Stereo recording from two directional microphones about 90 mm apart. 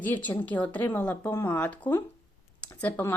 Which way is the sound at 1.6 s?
15° left (ahead or behind).